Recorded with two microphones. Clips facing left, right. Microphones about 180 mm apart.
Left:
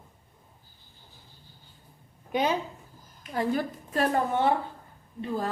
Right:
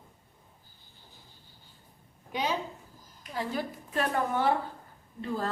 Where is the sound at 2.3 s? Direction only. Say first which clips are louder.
Left 5 dB; 55° left (ahead or behind).